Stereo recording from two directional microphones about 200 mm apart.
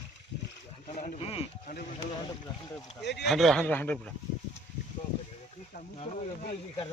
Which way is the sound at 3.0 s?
60° left (ahead or behind).